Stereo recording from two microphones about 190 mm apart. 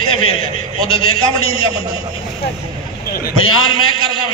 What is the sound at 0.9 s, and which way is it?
Speech, 90° left.